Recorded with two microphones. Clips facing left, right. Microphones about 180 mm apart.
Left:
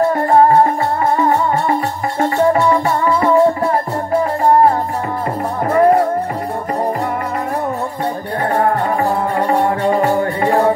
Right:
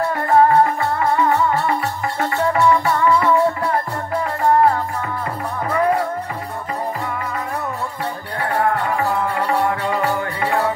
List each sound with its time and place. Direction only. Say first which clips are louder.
0.1 s music: left 3 dB; 35° left (ahead or behind)
5.7 s music: left 7 dB; 45° left (ahead or behind)
8.5 s music: left 3 dB; 35° left (ahead or behind)